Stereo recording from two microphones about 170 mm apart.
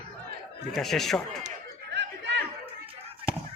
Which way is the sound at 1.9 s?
85° right.